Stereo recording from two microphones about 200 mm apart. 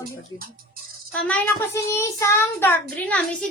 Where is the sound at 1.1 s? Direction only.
10° left (ahead or behind).